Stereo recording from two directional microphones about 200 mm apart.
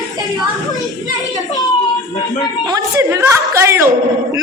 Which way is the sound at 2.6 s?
15° right (ahead or behind).